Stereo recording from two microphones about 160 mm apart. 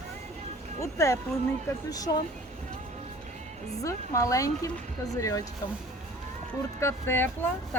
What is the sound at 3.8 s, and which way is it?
Speech, 20° left (ahead or behind).